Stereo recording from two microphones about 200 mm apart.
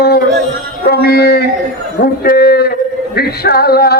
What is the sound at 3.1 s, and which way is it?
Music, 50° left (ahead or behind).